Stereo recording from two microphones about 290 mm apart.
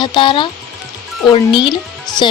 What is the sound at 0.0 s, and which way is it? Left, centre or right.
Speech, centre.